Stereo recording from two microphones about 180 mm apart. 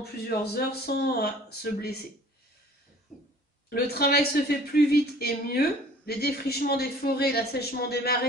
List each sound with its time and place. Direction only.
0.0 s a woman's voice: 60° left (ahead or behind)
3.7 s a woman's voice: 60° left (ahead or behind)